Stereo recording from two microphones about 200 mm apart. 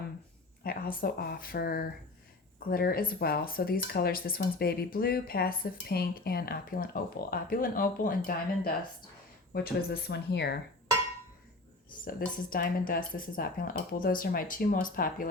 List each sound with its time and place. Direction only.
0.6 s speech: 45° left (ahead or behind)
12.5 s speech: 45° left (ahead or behind)